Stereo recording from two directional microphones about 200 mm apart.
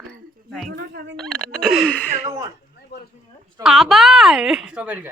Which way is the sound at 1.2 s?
5° left (ahead or behind).